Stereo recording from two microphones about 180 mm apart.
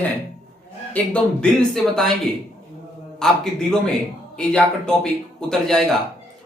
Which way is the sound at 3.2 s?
5° left (ahead or behind).